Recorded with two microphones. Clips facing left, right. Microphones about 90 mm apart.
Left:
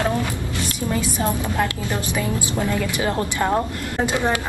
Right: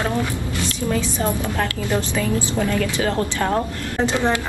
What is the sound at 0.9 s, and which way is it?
Speech, 10° left (ahead or behind).